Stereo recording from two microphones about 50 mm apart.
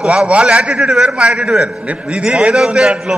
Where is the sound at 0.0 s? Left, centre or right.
Centre.